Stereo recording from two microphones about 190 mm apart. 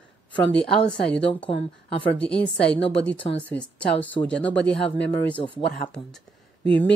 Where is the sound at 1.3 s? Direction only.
30° left (ahead or behind).